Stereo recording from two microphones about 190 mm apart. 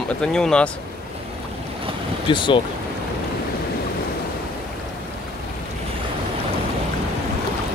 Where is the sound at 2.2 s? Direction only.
25° left (ahead or behind).